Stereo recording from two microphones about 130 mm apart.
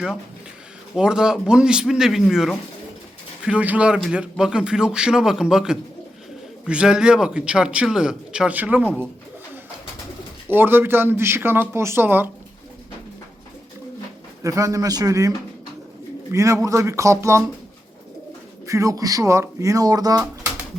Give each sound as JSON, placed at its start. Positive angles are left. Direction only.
{"t": 0.9, "sound": "a man's voice", "side_deg": -5}
{"t": 10.5, "sound": "speech", "side_deg": -15}
{"t": 14.4, "sound": "speech", "side_deg": -25}
{"t": 16.3, "sound": "speech", "side_deg": -25}
{"t": 18.6, "sound": "speech", "side_deg": -25}